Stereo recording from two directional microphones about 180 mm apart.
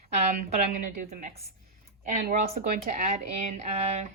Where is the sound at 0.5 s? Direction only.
40° right (ahead or behind).